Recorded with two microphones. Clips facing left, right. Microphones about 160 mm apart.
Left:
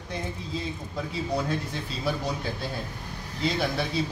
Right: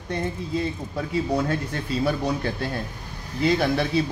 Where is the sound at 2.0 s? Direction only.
60° right (ahead or behind).